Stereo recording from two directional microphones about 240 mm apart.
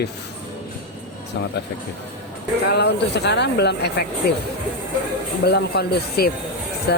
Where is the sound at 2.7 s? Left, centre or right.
Left.